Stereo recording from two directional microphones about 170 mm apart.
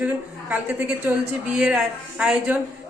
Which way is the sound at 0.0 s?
10° right (ahead or behind).